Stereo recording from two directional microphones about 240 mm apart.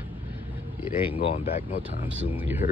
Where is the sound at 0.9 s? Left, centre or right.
Left.